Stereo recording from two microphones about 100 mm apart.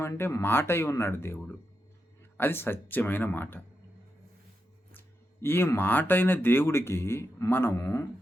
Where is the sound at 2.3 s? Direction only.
20° left (ahead or behind).